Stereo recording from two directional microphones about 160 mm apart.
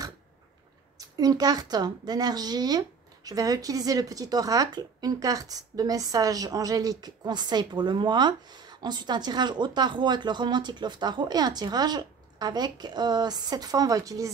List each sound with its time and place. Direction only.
0.9 s speech: 25° right (ahead or behind)